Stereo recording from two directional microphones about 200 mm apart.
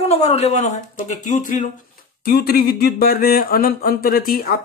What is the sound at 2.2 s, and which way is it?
Speech, 50° left (ahead or behind).